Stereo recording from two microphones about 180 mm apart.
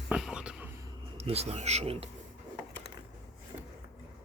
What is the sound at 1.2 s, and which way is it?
Speech, 35° right (ahead or behind).